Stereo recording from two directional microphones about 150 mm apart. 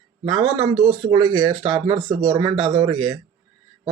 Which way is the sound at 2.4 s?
35° right (ahead or behind).